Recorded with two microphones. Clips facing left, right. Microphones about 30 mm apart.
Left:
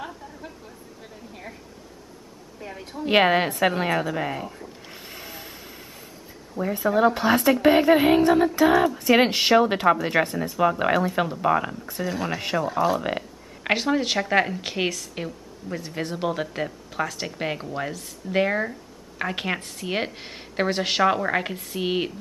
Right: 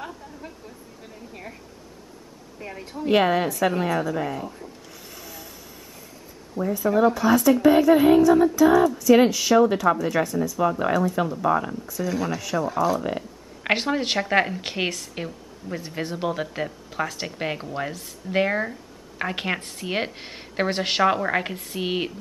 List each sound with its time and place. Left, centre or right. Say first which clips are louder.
0.0 s a sound: even; centre
2.8 s a woman's voice: right 1 dB; centre
3.1 s a woman's voice: left 1 dB; left
4.9 s vehicle: left 2 dB; left
6.6 s a sound: even; left
10.6 s a woman's voice: left 2 dB; left
11.4 s speech: even; left
12.8 s a woman's voice: even; left
13.7 s a woman's voice: even; centre